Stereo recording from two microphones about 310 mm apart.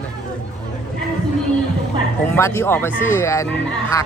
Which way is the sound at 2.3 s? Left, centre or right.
Centre.